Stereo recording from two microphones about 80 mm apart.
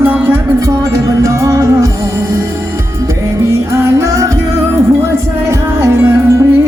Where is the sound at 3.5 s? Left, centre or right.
Right.